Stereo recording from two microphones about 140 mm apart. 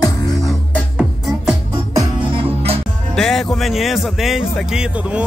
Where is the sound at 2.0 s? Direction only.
35° right (ahead or behind).